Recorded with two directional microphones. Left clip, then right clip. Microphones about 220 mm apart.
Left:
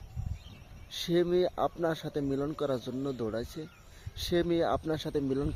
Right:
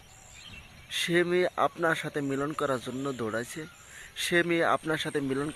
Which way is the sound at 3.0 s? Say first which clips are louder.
Right 2 dB; 15° right (ahead or behind).